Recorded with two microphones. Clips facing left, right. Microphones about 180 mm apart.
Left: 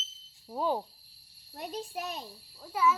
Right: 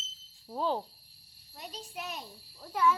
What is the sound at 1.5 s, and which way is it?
Speech, 55° left (ahead or behind).